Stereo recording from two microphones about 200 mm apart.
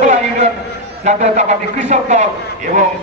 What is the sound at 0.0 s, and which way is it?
Music, 35° right (ahead or behind).